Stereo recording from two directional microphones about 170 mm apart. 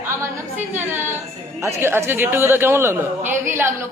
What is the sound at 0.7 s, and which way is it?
A woman's voice, 15° right (ahead or behind).